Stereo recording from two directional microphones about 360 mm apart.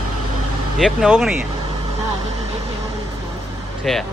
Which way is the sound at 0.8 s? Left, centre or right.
Centre.